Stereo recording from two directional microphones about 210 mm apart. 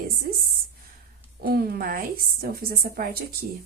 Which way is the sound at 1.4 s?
45° right (ahead or behind).